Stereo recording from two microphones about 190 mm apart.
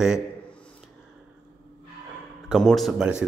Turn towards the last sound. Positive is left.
turn(degrees=-5)  # may be behind; listen again after turning